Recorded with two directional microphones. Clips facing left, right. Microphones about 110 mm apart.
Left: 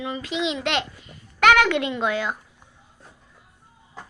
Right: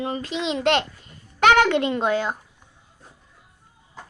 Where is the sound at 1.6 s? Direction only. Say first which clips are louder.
Right 2 dB; 40° right (ahead or behind).